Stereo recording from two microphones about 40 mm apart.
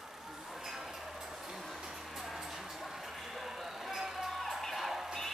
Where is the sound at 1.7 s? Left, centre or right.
Centre.